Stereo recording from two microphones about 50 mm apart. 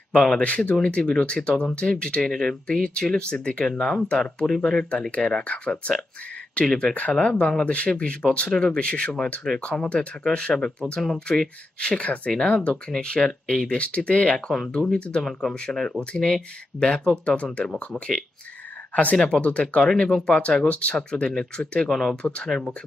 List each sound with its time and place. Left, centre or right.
0.1 s speech: centre
0.4 s speech: left
12.9 s speech: centre
13.7 s speech: left
14.7 s speech: centre
14.9 s speech: left
15.2 s speech: centre
21.8 s speech: centre
22.1 s speech: centre